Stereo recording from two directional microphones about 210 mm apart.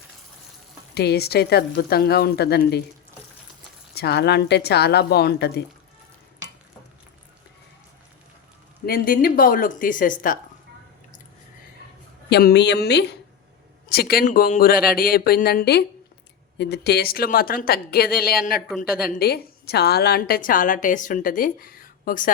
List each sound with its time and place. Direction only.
0.9 s speech: 50° left (ahead or behind)
3.9 s speech: 50° left (ahead or behind)
8.9 s a woman's voice: 45° left (ahead or behind)
12.3 s a woman's voice: 50° left (ahead or behind)